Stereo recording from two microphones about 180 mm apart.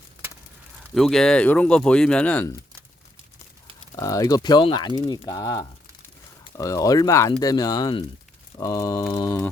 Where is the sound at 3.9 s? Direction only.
20° left (ahead or behind).